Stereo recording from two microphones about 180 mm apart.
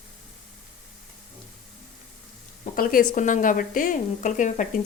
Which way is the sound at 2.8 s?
50° left (ahead or behind).